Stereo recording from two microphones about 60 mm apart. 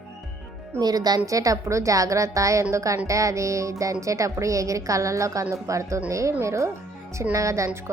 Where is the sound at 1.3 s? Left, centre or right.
Right.